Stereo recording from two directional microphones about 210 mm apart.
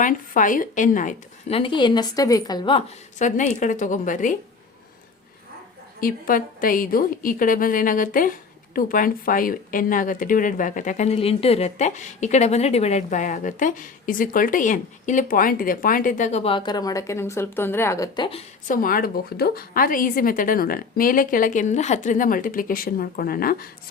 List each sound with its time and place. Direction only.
0.0 s a woman's voice: 40° left (ahead or behind); by 2.8 s 20° left (ahead or behind)
3.2 s speech: 35° left (ahead or behind)
6.0 s speech: 40° left (ahead or behind); by 18.4 s 25° left (ahead or behind)
18.7 s speech: 40° left (ahead or behind)